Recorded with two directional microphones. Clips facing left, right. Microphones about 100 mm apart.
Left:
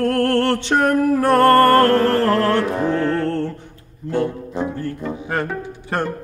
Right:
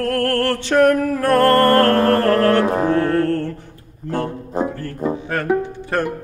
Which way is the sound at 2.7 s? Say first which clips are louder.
Right 2 dB; 40° right (ahead or behind).